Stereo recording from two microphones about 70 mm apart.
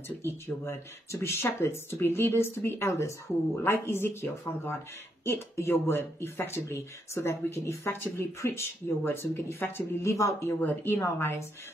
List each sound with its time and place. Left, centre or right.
0.2 s speech: left
10.1 s speech: left
10.6 s speech: left